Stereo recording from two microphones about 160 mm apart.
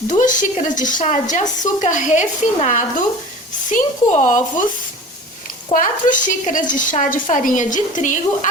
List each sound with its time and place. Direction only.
0.1 s a woman's voice: 50° left (ahead or behind)
5.7 s a woman's voice: 55° left (ahead or behind)